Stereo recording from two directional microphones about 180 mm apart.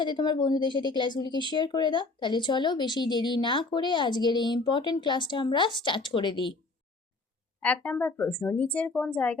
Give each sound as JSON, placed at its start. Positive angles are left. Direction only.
{"t": 0.0, "sound": "speech", "side_deg": 25}
{"t": 7.6, "sound": "a woman's voice", "side_deg": 10}